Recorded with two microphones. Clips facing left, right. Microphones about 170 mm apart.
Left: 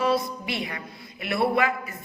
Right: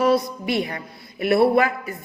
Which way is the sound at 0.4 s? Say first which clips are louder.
Right 7 dB; 40° right (ahead or behind).